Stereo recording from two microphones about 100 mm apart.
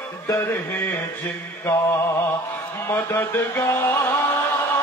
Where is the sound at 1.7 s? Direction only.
25° left (ahead or behind).